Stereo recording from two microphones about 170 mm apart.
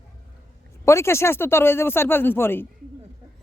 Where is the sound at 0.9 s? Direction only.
15° left (ahead or behind).